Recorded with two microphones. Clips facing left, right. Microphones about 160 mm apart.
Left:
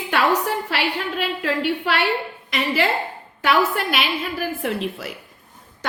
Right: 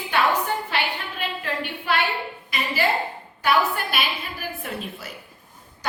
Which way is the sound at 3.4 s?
70° left (ahead or behind).